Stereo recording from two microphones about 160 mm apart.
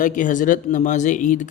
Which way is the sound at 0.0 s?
55° left (ahead or behind).